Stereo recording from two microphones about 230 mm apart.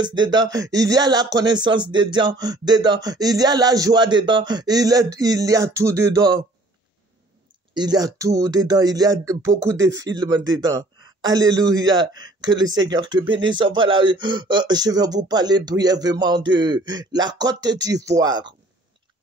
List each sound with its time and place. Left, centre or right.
0.0 s speech: centre
7.7 s speech: centre